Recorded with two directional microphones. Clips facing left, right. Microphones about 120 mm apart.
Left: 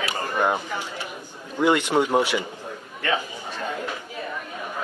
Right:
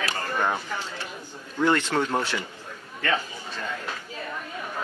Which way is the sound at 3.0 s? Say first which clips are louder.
Left 1 dB; 15° left (ahead or behind).